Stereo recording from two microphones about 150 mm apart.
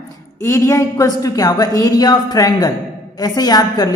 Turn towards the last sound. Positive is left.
turn(degrees=25)  # may be behind; listen again after turning